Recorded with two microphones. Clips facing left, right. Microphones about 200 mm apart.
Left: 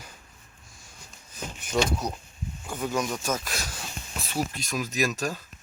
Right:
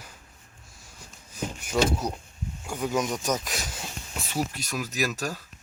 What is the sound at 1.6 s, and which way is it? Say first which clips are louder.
Speech: right 1 dB; 10° right (ahead or behind).